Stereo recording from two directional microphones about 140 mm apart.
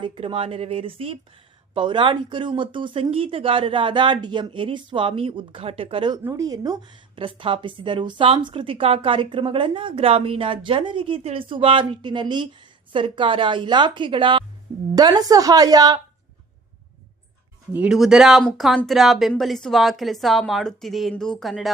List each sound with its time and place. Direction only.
0.0 s speech: 35° right (ahead or behind)
6.2 s a woman's voice: 25° right (ahead or behind)
17.7 s speech: 5° right (ahead or behind)